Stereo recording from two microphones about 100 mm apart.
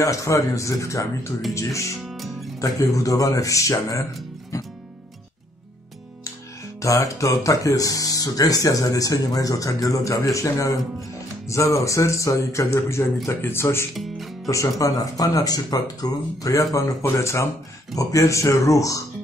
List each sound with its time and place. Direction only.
0.0 s speech: 30° left (ahead or behind)
2.0 s music: centre (ahead or behind)
2.6 s speech: 35° left (ahead or behind)
6.8 s speech: 35° left (ahead or behind)
13.9 s music: centre (ahead or behind)
14.5 s speech: 35° left (ahead or behind)